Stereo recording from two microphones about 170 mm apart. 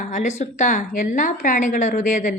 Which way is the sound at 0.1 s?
45° left (ahead or behind).